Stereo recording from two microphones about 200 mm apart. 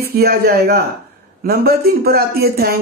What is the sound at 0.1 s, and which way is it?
A man's voice, 50° right (ahead or behind).